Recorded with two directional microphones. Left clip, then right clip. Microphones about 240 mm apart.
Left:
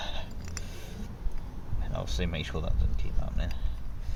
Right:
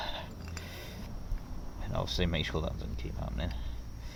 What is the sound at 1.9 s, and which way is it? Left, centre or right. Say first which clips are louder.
Speech: right 2 dB; centre.